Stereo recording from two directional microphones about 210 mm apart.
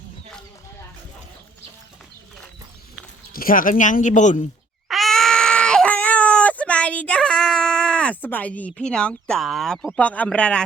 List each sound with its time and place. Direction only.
3.3 s speech: 40° left (ahead or behind)
4.9 s baby cry: centre (ahead or behind)